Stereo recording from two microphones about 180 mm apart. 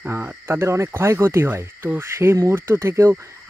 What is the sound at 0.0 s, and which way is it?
Speech, 10° right (ahead or behind).